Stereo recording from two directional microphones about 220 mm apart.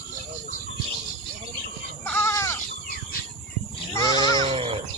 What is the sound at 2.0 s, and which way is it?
Sheep, 10° left (ahead or behind).